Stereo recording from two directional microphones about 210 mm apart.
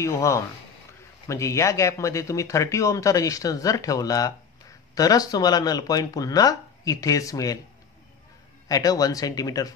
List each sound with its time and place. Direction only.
0.0 s speech: 15° left (ahead or behind)
8.6 s speech: 15° left (ahead or behind)